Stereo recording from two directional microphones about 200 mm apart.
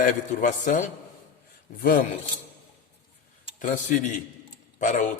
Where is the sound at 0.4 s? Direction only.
40° left (ahead or behind).